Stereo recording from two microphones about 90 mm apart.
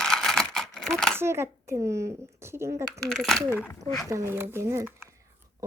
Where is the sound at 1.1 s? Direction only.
30° right (ahead or behind).